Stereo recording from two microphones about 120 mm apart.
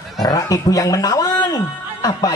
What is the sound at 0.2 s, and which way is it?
A man's voice, 30° left (ahead or behind).